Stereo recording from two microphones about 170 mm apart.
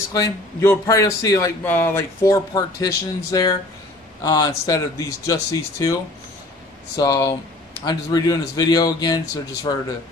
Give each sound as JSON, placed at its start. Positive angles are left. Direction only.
{"t": 0.1, "sound": "a man's voice", "side_deg": 15}
{"t": 7.0, "sound": "a man's voice", "side_deg": 20}